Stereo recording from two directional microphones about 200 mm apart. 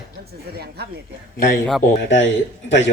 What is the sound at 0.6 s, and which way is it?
Speech, 55° right (ahead or behind).